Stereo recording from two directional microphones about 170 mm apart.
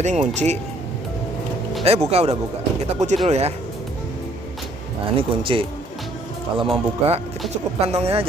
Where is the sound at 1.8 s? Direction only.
40° right (ahead or behind).